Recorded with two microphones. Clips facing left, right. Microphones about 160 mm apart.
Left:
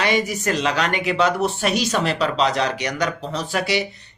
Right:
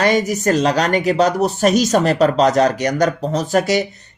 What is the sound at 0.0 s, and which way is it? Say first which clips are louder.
Speech: right 5 dB; 40° right (ahead or behind).